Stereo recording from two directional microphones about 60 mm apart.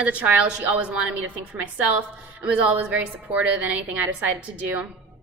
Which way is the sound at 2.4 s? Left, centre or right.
Right.